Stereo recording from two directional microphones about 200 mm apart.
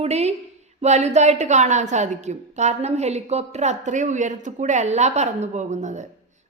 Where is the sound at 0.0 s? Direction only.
30° right (ahead or behind).